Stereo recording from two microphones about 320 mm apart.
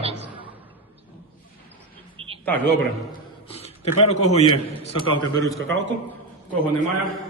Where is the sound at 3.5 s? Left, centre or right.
Centre.